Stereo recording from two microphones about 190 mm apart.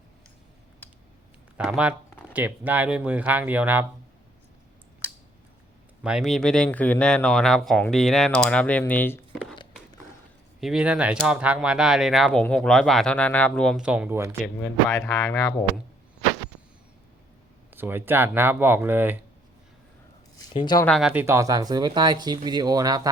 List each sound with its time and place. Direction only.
1.5 s speech: 5° right (ahead or behind)
6.0 s speech: 5° right (ahead or behind)
9.3 s a sound: centre (ahead or behind)
10.6 s speech: 5° right (ahead or behind)
14.4 s speech: 5° left (ahead or behind)
17.7 s speech: 10° right (ahead or behind)
20.3 s speech: 25° left (ahead or behind)
20.8 s speech: centre (ahead or behind)
21.1 s speech: 10° right (ahead or behind)